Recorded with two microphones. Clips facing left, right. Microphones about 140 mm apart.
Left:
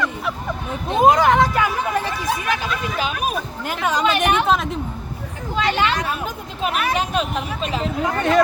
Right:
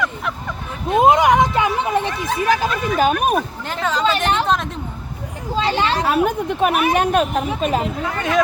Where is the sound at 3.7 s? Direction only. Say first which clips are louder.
Left 1 dB; 15° left (ahead or behind).